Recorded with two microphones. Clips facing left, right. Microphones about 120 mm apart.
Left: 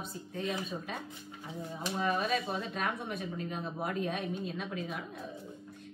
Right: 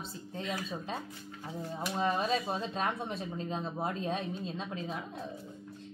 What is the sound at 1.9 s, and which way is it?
A woman's voice, 25° right (ahead or behind).